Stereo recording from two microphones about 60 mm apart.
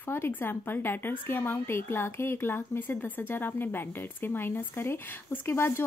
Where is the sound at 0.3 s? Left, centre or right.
Left.